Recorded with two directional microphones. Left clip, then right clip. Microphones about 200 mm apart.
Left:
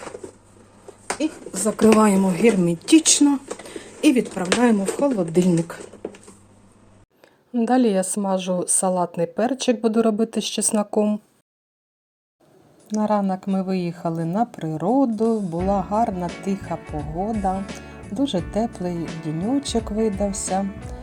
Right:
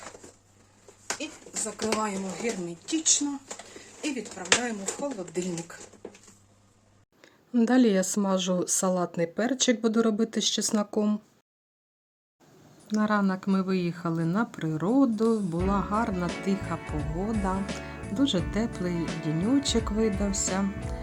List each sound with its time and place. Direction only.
1.6 s speech: 40° left (ahead or behind)
7.5 s speech: centre (ahead or behind)
12.9 s a woman's voice: 10° left (ahead or behind)